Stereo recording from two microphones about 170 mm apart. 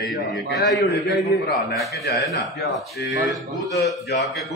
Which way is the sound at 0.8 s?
80° left.